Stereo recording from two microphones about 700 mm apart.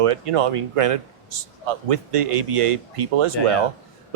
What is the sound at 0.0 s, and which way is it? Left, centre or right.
Speech, right.